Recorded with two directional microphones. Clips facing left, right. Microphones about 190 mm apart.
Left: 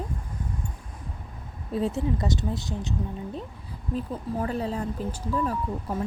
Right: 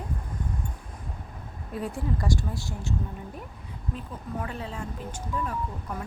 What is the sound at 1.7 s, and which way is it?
Speech, 25° left (ahead or behind).